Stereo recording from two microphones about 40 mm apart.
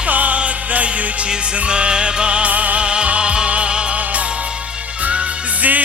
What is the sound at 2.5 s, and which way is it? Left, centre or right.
Music, right.